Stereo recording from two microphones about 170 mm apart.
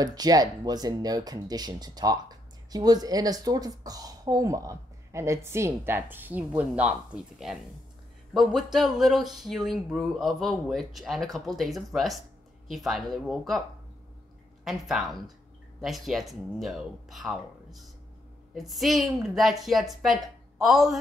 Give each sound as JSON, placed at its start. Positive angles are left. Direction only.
{"t": 0.0, "sound": "speech", "side_deg": -20}
{"t": 8.3, "sound": "speech", "side_deg": 0}
{"t": 14.6, "sound": "speech", "side_deg": 0}